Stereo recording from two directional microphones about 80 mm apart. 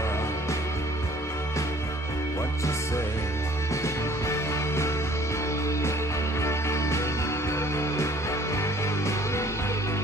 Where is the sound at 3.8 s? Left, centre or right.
Left.